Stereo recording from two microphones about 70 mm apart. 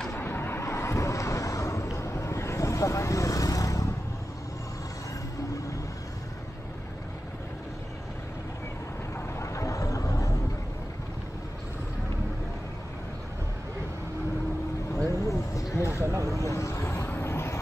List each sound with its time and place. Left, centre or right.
0.1 s vehicle: left
9.4 s vehicle: left
15.2 s a sound: left
16.0 s vehicle: right
16.3 s vehicle: left